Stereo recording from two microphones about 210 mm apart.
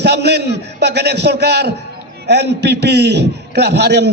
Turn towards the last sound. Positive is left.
turn(degrees=-55)  # may be behind; listen again after turning